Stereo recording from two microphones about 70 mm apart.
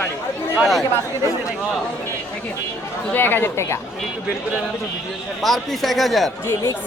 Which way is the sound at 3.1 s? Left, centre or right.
Left.